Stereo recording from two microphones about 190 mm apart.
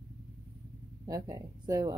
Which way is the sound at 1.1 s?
20° right (ahead or behind).